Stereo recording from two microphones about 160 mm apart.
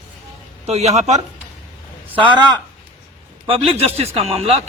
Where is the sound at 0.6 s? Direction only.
40° right (ahead or behind).